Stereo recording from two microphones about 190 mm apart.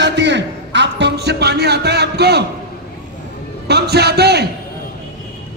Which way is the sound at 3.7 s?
60° right (ahead or behind).